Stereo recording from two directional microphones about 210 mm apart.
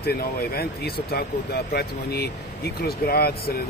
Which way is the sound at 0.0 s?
50° left (ahead or behind).